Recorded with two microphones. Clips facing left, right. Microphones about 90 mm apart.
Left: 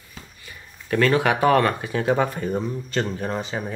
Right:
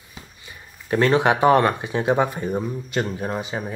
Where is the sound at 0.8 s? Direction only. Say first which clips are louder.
Right 2 dB; 25° right (ahead or behind).